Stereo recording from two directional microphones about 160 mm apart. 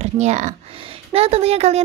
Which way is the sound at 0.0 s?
45° right (ahead or behind).